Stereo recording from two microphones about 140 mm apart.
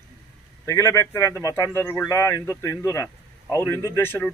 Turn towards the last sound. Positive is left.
turn(degrees=15)  # may be behind; listen again after turning